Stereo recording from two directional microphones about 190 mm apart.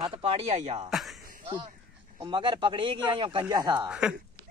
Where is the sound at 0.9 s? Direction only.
Centre (ahead or behind).